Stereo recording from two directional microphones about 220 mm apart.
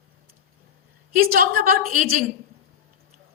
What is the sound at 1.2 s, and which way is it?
Speech, 40° right (ahead or behind).